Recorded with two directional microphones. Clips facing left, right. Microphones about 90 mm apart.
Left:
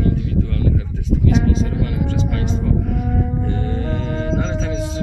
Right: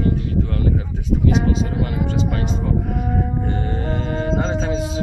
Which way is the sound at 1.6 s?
30° right (ahead or behind).